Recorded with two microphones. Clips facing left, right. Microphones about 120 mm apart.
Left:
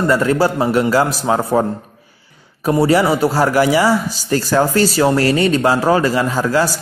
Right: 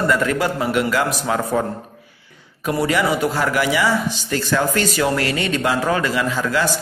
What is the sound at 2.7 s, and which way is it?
A man's voice, 25° left (ahead or behind).